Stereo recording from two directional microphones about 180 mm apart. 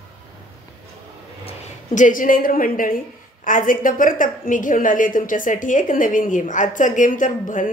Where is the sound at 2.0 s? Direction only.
45° left (ahead or behind).